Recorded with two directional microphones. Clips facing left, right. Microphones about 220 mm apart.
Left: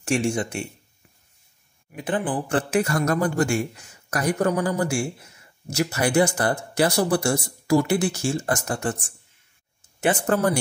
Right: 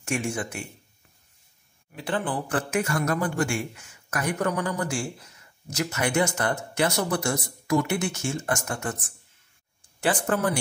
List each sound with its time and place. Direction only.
0.3 s speech: 30° left (ahead or behind)
1.9 s speech: 15° left (ahead or behind)
2.5 s a man's voice: 35° left (ahead or behind)
9.9 s speech: 20° left (ahead or behind)
10.2 s a man's voice: 40° left (ahead or behind)